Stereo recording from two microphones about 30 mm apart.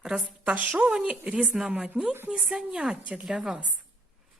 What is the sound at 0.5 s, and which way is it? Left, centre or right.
Speech, right.